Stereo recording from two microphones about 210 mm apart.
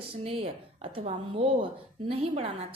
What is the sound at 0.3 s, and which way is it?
Speech, 30° right (ahead or behind).